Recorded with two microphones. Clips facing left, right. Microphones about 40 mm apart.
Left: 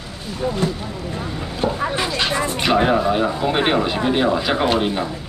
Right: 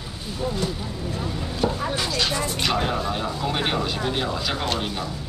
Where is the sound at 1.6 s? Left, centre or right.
Left.